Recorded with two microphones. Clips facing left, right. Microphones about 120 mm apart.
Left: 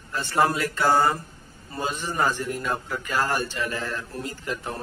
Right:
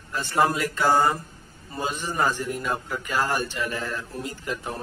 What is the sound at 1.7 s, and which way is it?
A man's voice, 10° right (ahead or behind).